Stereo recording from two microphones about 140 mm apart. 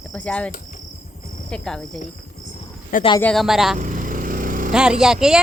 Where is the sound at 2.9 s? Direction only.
80° left.